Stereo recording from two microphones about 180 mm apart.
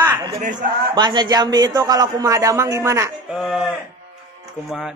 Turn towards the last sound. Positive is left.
turn(degrees=0)  # may be behind; listen again after turning